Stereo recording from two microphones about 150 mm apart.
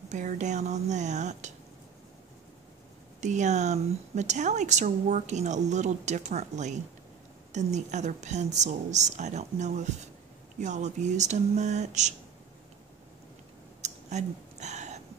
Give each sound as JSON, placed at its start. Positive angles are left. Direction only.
{"t": 0.1, "sound": "a woman's voice", "side_deg": -55}
{"t": 3.2, "sound": "a woman's voice", "side_deg": -55}
{"t": 13.7, "sound": "a sound", "side_deg": -50}